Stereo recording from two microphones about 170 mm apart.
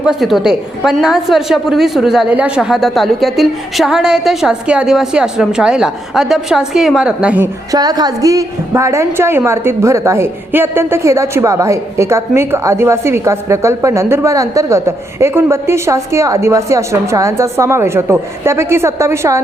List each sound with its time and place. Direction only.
0.0 s a woman's voice: centre (ahead or behind)
7.7 s a woman's voice: 20° right (ahead or behind)